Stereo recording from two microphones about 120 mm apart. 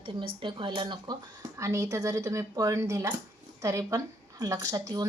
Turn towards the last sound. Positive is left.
turn(degrees=-30)  # may be behind; listen again after turning